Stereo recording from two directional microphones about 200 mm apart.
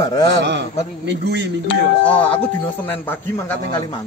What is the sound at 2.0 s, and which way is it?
Speech, 5° left (ahead or behind).